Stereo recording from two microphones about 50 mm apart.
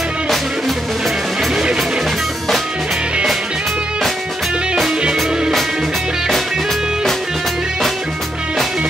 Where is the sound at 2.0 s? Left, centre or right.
Centre.